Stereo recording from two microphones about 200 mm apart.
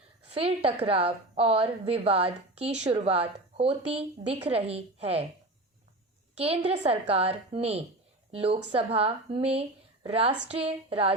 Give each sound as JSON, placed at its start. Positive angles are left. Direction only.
{"t": 0.3, "sound": "a woman's voice", "side_deg": -30}
{"t": 6.3, "sound": "a woman's voice", "side_deg": -30}